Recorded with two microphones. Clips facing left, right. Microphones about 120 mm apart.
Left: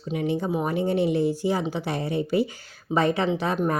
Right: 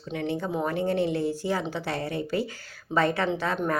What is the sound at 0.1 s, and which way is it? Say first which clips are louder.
Speech: left 4 dB; 15° left (ahead or behind).